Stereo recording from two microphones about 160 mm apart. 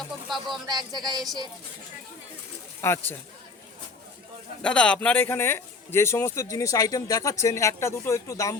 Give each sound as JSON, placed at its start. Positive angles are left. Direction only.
{"t": 0.3, "sound": "speech", "side_deg": 0}
{"t": 0.7, "sound": "speech", "side_deg": -25}
{"t": 2.8, "sound": "speech", "side_deg": 15}
{"t": 4.6, "sound": "speech", "side_deg": 5}